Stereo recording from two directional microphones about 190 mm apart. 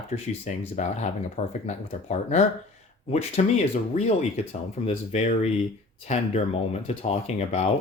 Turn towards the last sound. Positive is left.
turn(degrees=35)  # may be behind; listen again after turning